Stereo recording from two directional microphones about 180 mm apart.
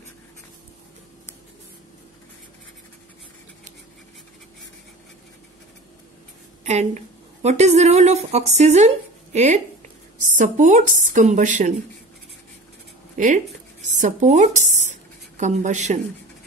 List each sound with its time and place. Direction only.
6.6 s a woman's voice: 40° right (ahead or behind)
13.2 s speech: 45° right (ahead or behind)